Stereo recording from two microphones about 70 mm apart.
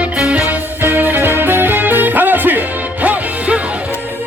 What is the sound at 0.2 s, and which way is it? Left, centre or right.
Music, centre.